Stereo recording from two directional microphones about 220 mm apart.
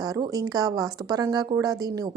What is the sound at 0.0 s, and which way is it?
A woman's voice, 15° right (ahead or behind).